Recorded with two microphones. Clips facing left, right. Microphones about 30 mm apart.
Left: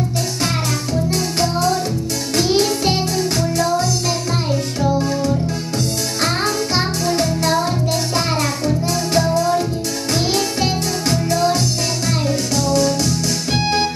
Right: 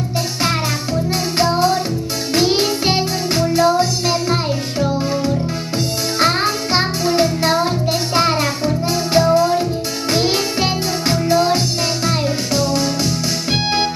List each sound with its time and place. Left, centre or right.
1.1 s music: centre